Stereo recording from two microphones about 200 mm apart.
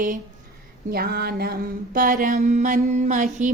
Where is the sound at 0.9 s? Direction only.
50° right (ahead or behind).